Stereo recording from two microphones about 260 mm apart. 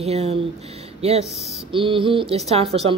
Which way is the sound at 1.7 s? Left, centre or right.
Centre.